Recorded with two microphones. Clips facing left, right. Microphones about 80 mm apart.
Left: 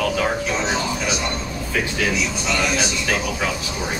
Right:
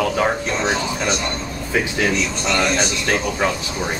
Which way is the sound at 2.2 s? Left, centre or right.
Centre.